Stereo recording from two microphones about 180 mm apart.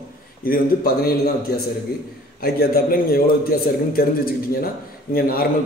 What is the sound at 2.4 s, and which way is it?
A man's voice, 55° left (ahead or behind).